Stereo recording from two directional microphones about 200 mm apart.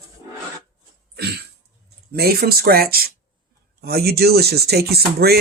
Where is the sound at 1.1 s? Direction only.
55° right (ahead or behind).